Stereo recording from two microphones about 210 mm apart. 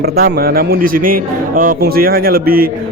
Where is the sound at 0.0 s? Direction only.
45° right (ahead or behind).